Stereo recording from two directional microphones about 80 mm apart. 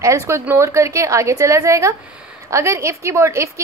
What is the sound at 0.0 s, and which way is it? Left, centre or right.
A woman's voice, right.